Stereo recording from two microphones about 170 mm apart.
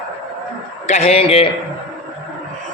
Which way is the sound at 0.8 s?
40° left (ahead or behind).